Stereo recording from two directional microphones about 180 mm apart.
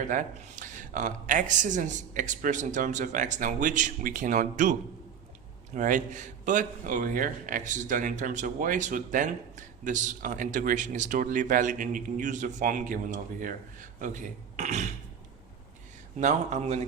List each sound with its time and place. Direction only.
0.1 s a man's voice: 45° right (ahead or behind)
16.2 s speech: 40° right (ahead or behind)